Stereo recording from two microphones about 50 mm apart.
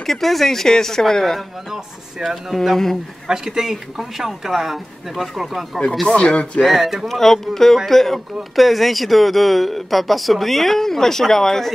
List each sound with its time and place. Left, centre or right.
0.0 s speech: centre
2.5 s speech: centre
3.3 s a man's voice: centre
6.0 s speech: centre
6.6 s speech: centre
7.1 s speech: centre